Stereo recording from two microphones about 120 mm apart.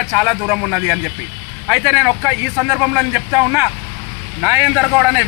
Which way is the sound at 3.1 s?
20° right (ahead or behind).